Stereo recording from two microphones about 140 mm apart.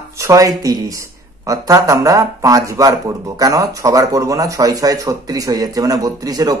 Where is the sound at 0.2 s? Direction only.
25° right (ahead or behind).